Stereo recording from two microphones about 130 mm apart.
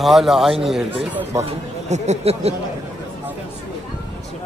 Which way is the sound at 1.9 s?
55° right (ahead or behind).